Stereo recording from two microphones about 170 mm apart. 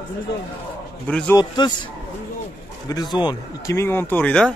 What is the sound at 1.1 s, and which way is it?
Speech, 5° left (ahead or behind).